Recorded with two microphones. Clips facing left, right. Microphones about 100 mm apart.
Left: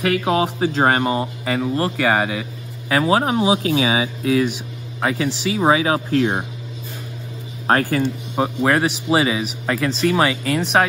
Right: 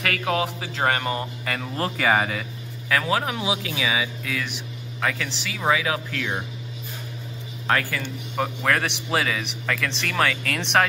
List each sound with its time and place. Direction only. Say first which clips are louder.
0.0 s a man's voice: left 6 dB; 25° left (ahead or behind)
1.7 s speech: left 2 dB; centre (ahead or behind)
2.9 s speech: left 6 dB; 30° left (ahead or behind)
7.6 s speech: left 6 dB; 40° left (ahead or behind)
8.0 s a man's voice: left 7 dB; 20° left (ahead or behind)